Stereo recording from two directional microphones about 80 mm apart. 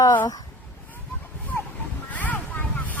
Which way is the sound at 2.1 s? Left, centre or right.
Centre.